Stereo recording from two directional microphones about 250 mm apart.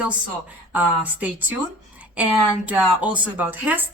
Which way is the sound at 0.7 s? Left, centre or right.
Centre.